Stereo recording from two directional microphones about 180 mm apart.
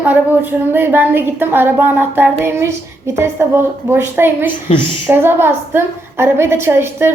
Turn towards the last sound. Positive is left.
turn(degrees=-15)  # may be behind; listen again after turning